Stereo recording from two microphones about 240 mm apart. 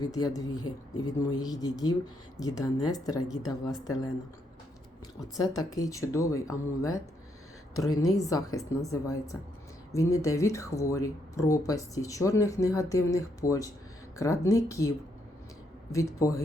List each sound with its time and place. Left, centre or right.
0.0 s speech: centre
5.4 s speech: centre